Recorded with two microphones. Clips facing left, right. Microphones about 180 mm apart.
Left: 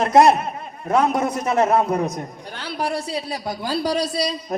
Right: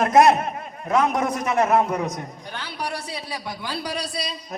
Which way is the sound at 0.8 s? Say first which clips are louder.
Left 2 dB; 35° left (ahead or behind).